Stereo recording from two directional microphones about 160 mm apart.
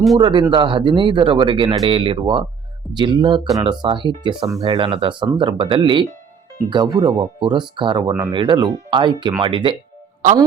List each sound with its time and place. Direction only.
0.2 s speech: 30° right (ahead or behind)